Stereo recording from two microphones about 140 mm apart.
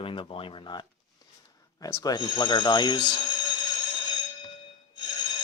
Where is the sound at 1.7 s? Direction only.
25° left (ahead or behind).